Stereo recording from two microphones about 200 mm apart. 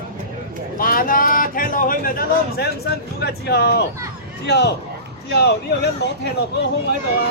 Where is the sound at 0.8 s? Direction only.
45° left (ahead or behind).